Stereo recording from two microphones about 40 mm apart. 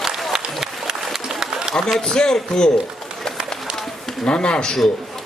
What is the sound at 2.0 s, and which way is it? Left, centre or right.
Speech, centre.